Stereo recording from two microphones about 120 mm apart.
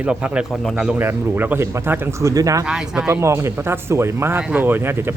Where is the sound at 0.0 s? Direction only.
10° right (ahead or behind); by 2.6 s 30° right (ahead or behind).